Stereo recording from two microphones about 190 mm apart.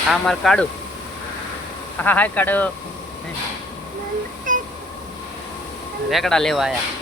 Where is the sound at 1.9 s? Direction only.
10° left (ahead or behind).